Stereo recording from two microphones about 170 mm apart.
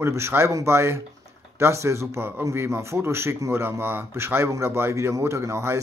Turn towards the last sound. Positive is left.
turn(degrees=-15)  # may be behind; listen again after turning